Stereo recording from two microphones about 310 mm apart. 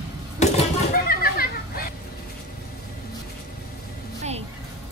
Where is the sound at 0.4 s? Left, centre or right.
Left.